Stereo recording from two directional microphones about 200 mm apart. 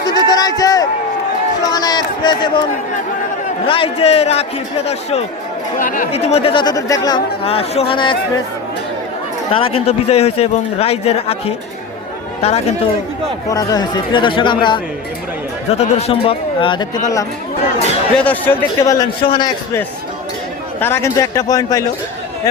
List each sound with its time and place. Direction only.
0.0 s a sound: 20° left (ahead or behind)
1.6 s run: 20° left (ahead or behind)
3.7 s a man's voice: 25° left (ahead or behind)
5.8 s speech: 40° left (ahead or behind)
6.1 s speech: 30° left (ahead or behind)
7.4 s speech: 30° left (ahead or behind)
9.5 s a man's voice: 25° left (ahead or behind)
13.5 s speech: 20° left (ahead or behind)
15.8 s speech: 35° left (ahead or behind)
18.2 s a man's voice: 10° left (ahead or behind)
20.8 s a man's voice: 10° left (ahead or behind)